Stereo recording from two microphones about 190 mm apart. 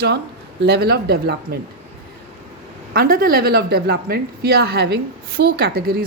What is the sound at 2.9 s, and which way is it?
Speech, 50° right (ahead or behind).